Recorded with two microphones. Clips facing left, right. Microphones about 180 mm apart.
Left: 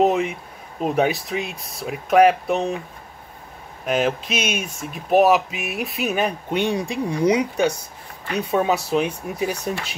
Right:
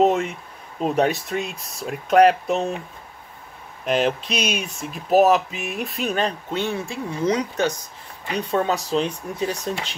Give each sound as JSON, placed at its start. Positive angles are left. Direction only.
{"t": 0.0, "sound": "speech", "side_deg": 5}
{"t": 3.8, "sound": "speech", "side_deg": 0}